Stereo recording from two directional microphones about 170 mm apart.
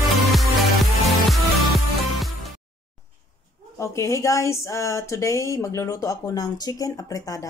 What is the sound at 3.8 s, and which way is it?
Speech, 15° left (ahead or behind).